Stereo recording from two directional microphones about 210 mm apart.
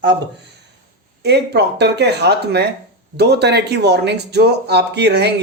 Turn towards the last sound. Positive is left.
turn(degrees=-50)  # may be behind; listen again after turning